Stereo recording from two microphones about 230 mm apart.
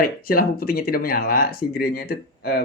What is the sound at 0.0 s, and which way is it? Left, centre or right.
Speech, left.